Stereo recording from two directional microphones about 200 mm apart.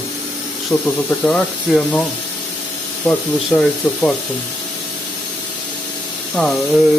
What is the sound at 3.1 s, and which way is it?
Speech, 5° left (ahead or behind).